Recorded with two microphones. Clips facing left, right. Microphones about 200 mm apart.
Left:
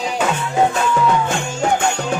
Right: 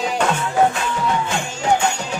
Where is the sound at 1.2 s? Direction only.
50° left (ahead or behind).